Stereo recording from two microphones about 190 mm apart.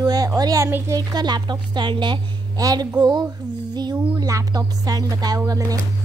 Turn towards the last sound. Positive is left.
turn(degrees=-20)  # may be behind; listen again after turning